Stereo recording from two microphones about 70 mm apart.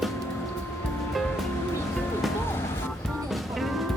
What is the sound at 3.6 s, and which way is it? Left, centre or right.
Music, centre.